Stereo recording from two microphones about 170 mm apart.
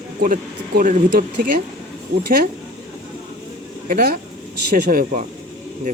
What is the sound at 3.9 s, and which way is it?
Speech, 60° right (ahead or behind).